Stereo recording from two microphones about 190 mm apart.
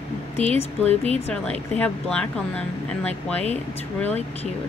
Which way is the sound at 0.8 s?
30° right (ahead or behind).